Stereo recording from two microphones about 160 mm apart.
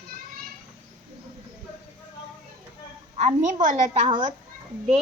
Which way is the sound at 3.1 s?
50° right (ahead or behind).